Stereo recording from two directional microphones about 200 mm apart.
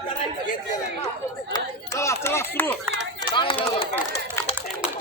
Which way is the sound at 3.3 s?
25° left (ahead or behind).